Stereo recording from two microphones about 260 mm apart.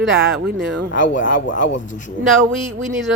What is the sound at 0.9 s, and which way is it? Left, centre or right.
Speech, left.